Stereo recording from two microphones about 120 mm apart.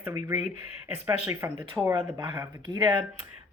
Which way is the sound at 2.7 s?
40° right (ahead or behind).